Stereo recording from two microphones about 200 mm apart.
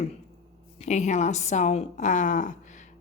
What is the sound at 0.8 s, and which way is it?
A woman's voice, 35° left (ahead or behind).